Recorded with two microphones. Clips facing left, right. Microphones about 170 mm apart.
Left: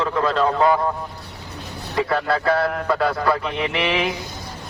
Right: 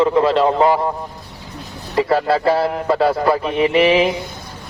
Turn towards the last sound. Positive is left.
turn(degrees=-25)  # may be behind; listen again after turning